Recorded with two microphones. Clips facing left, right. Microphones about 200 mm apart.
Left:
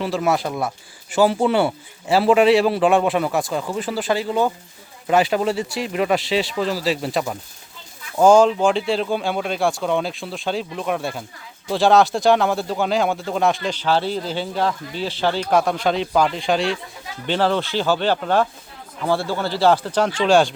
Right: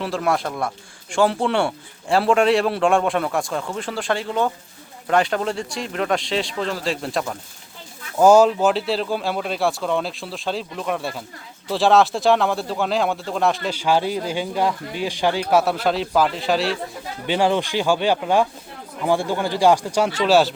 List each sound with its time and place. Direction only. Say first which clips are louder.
0.0 s speech: left 2 dB; centre (ahead or behind)
8.2 s speech: even; 10° right (ahead or behind)